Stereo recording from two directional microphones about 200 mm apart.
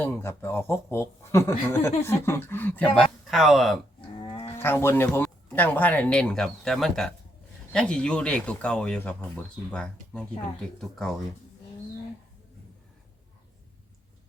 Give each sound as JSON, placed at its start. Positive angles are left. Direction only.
{"t": 0.0, "sound": "speech", "side_deg": 10}
{"t": 4.3, "sound": "livestock", "side_deg": 25}
{"t": 4.5, "sound": "speech", "side_deg": 10}